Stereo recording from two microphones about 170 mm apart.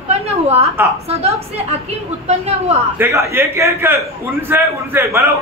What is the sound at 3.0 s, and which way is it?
A man's voice, 15° right (ahead or behind).